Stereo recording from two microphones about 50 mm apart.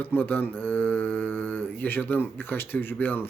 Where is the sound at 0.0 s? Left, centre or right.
Left.